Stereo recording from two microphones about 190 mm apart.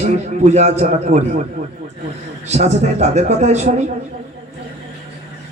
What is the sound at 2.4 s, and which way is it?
A man's voice, 35° right (ahead or behind).